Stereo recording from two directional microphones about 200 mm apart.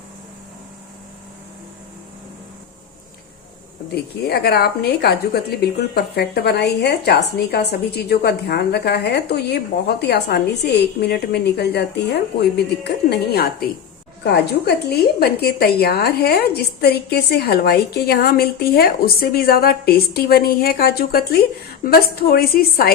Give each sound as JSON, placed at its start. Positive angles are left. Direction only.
{"t": 3.9, "sound": "a woman's voice", "side_deg": 50}